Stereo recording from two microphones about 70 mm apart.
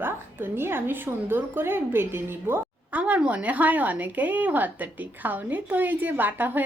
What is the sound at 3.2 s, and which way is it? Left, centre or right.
A woman's voice, centre.